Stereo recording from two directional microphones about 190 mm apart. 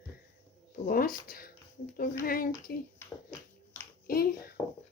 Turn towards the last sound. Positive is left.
turn(degrees=55)  # may be behind; listen again after turning